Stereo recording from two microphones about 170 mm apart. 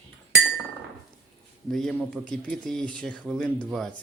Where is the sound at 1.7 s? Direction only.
Centre (ahead or behind).